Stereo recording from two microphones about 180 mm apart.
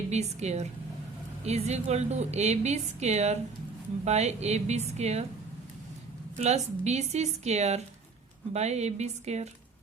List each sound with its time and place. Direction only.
0.1 s a woman's voice: 40° right (ahead or behind)
6.3 s a woman's voice: 40° right (ahead or behind)